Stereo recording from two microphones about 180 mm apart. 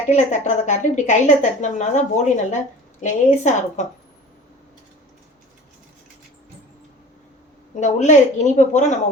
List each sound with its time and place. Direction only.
0.1 s a woman's voice: 40° left (ahead or behind)
7.8 s a woman's voice: 40° left (ahead or behind)